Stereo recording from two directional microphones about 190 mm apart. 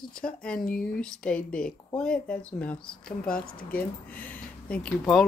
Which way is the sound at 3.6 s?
50° left (ahead or behind).